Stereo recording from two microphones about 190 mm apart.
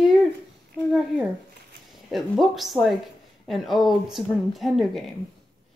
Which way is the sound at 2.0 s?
Centre (ahead or behind).